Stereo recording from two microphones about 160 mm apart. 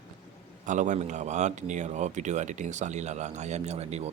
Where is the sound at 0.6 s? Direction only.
50° right (ahead or behind).